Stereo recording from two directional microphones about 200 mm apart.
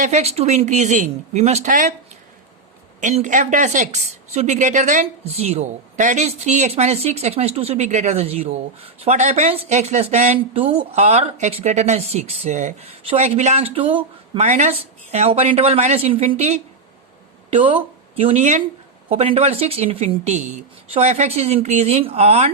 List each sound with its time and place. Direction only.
0.0 s a woman's voice: 35° right (ahead or behind)
3.0 s a woman's voice: 35° right (ahead or behind)